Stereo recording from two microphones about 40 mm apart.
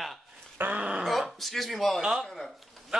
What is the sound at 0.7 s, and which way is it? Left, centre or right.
Dog, right.